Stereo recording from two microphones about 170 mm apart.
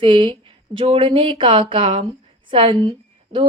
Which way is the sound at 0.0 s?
30° right (ahead or behind).